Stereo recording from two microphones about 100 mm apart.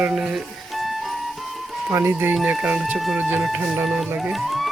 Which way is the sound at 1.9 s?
25° right (ahead or behind).